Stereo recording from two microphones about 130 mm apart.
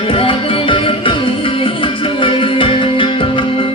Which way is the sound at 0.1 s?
45° left (ahead or behind).